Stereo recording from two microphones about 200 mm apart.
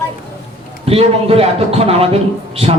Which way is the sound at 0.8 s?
30° right (ahead or behind).